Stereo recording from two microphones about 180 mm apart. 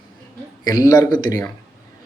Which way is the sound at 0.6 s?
20° left (ahead or behind).